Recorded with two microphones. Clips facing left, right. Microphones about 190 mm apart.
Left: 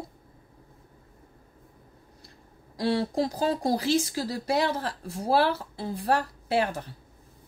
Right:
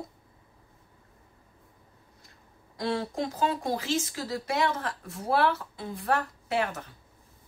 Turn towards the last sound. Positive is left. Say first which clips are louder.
# left 3 dB
turn(degrees=35)  # may be behind; listen again after turning